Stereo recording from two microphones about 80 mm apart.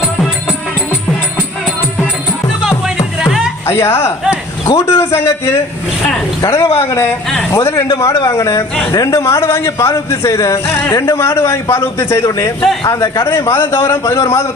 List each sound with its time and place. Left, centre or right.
2.6 s music: centre
3.7 s a man's voice: left